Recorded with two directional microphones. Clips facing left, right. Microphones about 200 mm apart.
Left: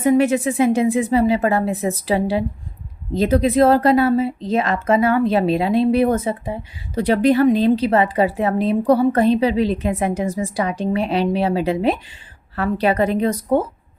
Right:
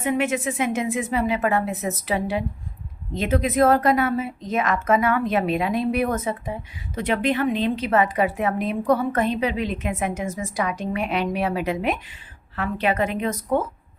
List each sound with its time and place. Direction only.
0.0 s speech: 35° left (ahead or behind)